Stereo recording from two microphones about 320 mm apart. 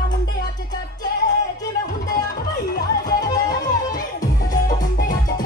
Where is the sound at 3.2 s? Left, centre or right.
Centre.